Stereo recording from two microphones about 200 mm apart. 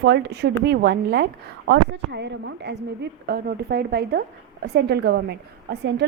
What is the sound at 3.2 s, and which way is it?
A woman's voice, 50° right (ahead or behind).